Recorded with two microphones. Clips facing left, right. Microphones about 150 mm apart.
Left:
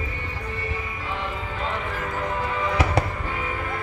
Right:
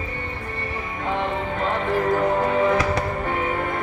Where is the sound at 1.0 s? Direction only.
50° right (ahead or behind).